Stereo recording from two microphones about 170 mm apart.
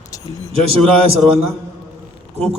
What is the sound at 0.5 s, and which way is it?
Speech, 35° right (ahead or behind).